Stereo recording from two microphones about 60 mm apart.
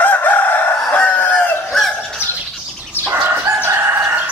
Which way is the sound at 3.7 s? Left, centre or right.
Right.